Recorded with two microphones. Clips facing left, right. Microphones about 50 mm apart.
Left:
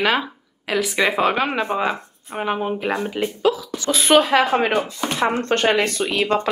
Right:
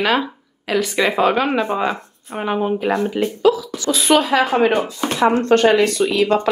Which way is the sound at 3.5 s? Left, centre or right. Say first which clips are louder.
Right 2 dB; left.